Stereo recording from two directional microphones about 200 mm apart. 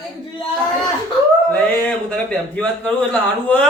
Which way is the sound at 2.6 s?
5° left (ahead or behind).